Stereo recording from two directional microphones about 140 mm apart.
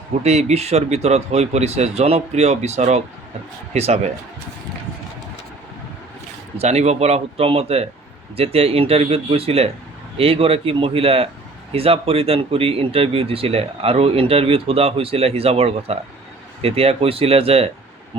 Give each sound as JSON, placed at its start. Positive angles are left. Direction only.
{"t": 0.2, "sound": "speech", "side_deg": -50}
{"t": 6.6, "sound": "speech", "side_deg": -50}